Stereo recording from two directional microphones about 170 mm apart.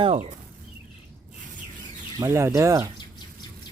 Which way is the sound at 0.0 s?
35° right (ahead or behind).